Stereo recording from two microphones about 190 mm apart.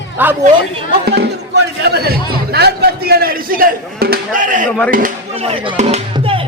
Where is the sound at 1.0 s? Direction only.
60° right (ahead or behind).